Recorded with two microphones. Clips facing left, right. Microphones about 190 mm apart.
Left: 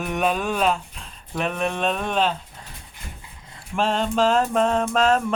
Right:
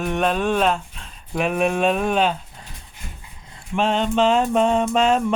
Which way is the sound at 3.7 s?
Centre (ahead or behind).